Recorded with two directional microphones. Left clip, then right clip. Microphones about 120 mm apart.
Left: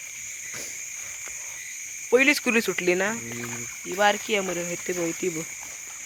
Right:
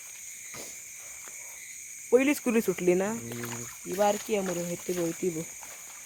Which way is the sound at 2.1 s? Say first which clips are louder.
Left 5 dB; 20° right (ahead or behind).